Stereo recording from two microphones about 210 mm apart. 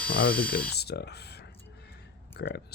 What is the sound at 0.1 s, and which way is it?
Speech, 45° left (ahead or behind).